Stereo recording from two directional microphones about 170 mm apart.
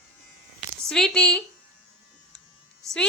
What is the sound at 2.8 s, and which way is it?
Speech, centre (ahead or behind).